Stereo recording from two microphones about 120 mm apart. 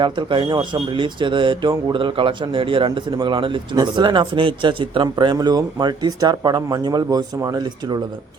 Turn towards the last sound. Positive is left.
turn(degrees=-35)  # may be behind; listen again after turning